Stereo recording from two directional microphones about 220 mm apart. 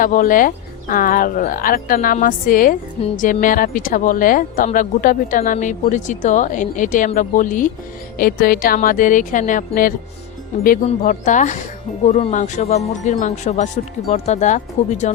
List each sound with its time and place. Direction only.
0.0 s speech: 40° left (ahead or behind)